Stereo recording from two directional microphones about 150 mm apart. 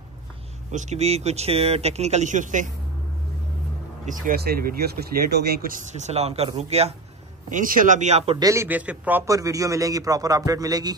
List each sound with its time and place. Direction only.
0.7 s speech: 50° right (ahead or behind)
4.0 s speech: 65° right (ahead or behind); by 6.9 s 45° right (ahead or behind)
7.5 s speech: 65° right (ahead or behind); by 8.4 s 45° right (ahead or behind)
8.4 s a man's voice: 20° right (ahead or behind)
8.6 s a man's voice: 10° right (ahead or behind); by 11.0 s 25° right (ahead or behind)